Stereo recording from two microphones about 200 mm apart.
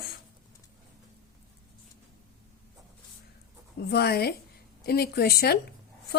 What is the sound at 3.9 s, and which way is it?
Speech, 50° left (ahead or behind).